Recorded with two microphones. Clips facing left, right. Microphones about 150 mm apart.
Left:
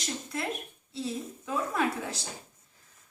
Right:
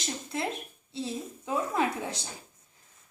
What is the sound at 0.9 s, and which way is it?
A woman's voice, 25° right (ahead or behind).